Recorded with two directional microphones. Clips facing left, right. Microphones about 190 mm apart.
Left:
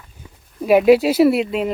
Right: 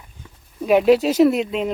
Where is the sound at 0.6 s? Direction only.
5° left (ahead or behind).